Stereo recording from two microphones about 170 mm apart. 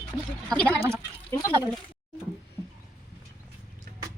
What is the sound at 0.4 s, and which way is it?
A woman's voice, 5° left (ahead or behind).